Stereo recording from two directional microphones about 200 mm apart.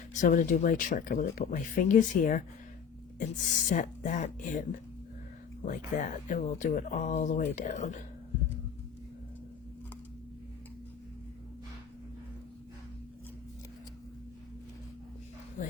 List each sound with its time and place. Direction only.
0.1 s speech: 40° left (ahead or behind)